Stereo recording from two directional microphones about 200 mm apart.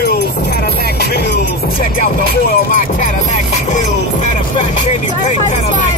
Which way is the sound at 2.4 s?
45° left (ahead or behind).